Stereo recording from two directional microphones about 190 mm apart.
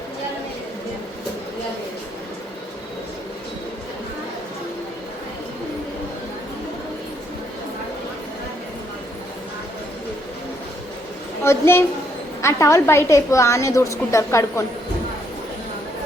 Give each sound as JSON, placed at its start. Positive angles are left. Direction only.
{"t": 11.4, "sound": "a woman's voice", "side_deg": 10}